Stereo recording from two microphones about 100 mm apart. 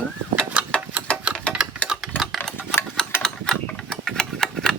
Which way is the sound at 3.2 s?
5° left (ahead or behind).